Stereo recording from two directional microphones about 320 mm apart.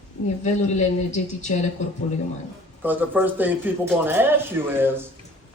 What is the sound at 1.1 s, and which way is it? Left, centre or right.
Speech, left.